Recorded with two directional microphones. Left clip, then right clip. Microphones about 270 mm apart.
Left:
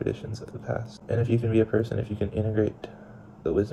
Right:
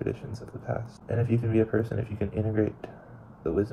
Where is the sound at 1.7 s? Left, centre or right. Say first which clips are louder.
Left 2 dB; centre.